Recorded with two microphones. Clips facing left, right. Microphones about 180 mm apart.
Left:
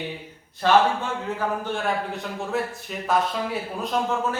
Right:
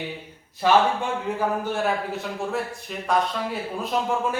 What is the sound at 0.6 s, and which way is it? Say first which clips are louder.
A man's voice: even; 10° right (ahead or behind).